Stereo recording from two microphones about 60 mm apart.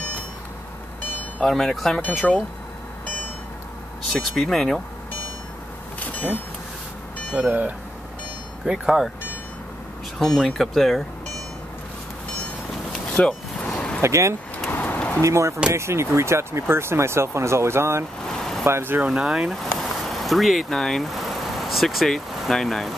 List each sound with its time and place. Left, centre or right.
1.5 s speech: centre
4.1 s speech: centre
5.9 s a sound: left
7.4 s speech: right
8.6 s speech: centre
10.1 s speech: centre
13.1 s vehicle: centre
14.0 s speech: right
14.7 s a sound: left
15.2 s speech: right
18.2 s vehicle: centre
18.6 s speech: right
19.0 s speech: centre
19.5 s speech: centre